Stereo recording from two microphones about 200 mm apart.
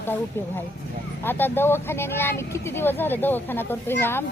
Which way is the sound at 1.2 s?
10° left (ahead or behind).